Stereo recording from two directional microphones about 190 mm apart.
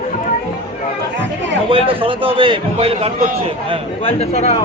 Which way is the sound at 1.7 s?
30° right (ahead or behind).